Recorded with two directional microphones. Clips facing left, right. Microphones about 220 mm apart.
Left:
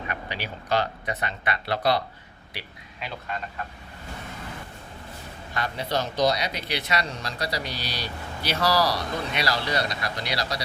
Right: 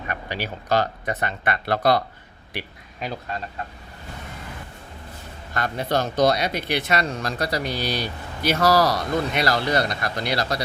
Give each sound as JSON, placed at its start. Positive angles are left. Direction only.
{"t": 0.1, "sound": "speech", "side_deg": -45}
{"t": 5.5, "sound": "speech", "side_deg": -50}